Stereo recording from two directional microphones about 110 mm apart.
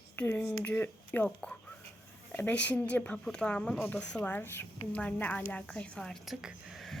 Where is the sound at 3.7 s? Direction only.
20° left (ahead or behind).